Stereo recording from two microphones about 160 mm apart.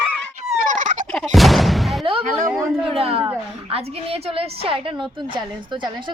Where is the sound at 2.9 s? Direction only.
35° right (ahead or behind).